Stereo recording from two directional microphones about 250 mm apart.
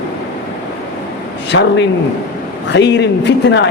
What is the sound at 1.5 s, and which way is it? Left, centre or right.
Speech, left.